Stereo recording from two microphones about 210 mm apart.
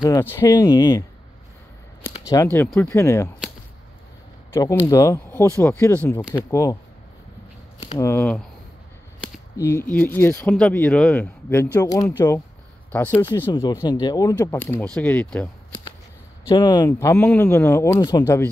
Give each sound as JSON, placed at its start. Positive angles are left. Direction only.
{"t": 0.0, "sound": "speech", "side_deg": 15}
{"t": 2.2, "sound": "speech", "side_deg": 10}
{"t": 4.6, "sound": "speech", "side_deg": 15}
{"t": 8.0, "sound": "speech", "side_deg": 10}
{"t": 9.6, "sound": "speech", "side_deg": 10}
{"t": 16.4, "sound": "speech", "side_deg": 20}